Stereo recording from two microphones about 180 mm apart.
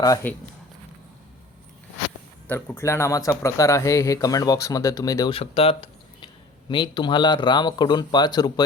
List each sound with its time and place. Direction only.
0.0 s speech: 15° left (ahead or behind)
2.5 s speech: 15° left (ahead or behind)